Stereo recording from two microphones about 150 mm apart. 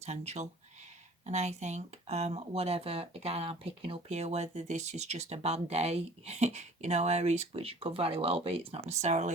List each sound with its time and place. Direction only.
0.0 s speech: 50° right (ahead or behind)